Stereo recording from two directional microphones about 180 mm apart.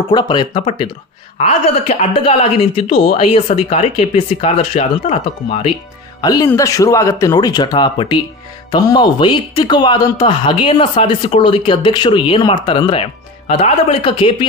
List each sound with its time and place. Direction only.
0.1 s speech: 25° left (ahead or behind)
6.2 s speech: 20° left (ahead or behind)